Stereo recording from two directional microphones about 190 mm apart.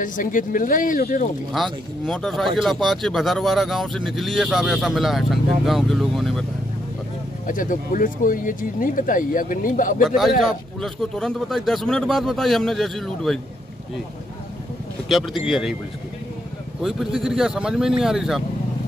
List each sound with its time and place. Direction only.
0.0 s speech: 45° left (ahead or behind)
1.5 s speech: centre (ahead or behind)
7.4 s speech: 45° left (ahead or behind)
10.0 s speech: centre (ahead or behind)
15.0 s speech: centre (ahead or behind)
16.8 s speech: centre (ahead or behind)